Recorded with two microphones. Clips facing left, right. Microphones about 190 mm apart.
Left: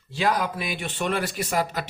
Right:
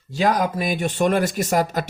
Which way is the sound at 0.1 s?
45° right (ahead or behind).